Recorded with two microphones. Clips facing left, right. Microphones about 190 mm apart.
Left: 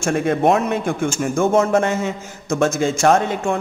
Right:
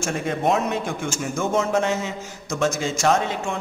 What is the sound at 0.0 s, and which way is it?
A man's voice, 55° left (ahead or behind).